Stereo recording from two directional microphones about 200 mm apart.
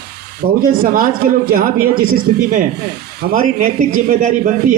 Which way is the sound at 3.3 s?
40° right (ahead or behind).